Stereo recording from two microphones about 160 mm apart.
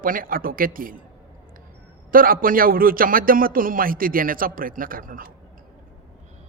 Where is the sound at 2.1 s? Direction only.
60° right (ahead or behind).